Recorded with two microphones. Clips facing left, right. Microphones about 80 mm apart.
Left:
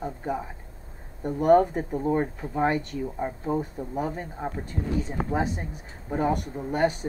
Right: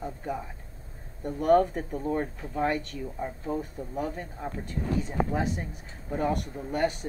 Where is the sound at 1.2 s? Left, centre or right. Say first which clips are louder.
Left 3 dB; centre.